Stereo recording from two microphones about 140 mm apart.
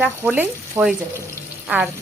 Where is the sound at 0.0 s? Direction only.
15° right (ahead or behind).